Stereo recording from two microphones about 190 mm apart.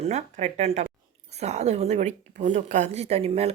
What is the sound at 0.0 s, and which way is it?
A woman's voice, 35° right (ahead or behind).